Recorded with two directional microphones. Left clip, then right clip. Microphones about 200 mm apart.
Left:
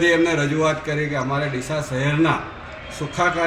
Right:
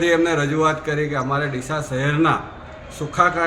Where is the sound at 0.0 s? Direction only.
5° right (ahead or behind).